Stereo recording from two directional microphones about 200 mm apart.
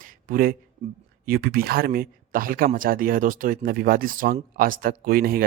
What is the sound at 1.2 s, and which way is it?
Speech, 45° right (ahead or behind).